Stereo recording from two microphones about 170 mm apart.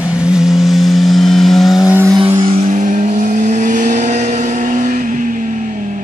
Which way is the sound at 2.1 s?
30° right (ahead or behind).